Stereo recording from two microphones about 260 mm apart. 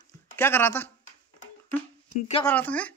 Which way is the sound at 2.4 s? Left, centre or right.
Centre.